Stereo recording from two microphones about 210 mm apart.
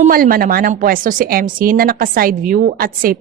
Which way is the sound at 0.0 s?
45° right (ahead or behind).